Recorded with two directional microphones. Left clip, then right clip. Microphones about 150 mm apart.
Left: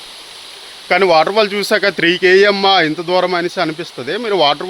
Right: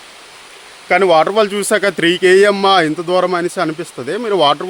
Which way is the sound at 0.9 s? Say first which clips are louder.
Even; 30° right (ahead or behind).